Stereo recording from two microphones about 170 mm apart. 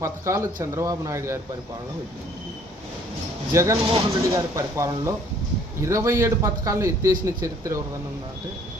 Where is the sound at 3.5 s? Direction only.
15° right (ahead or behind).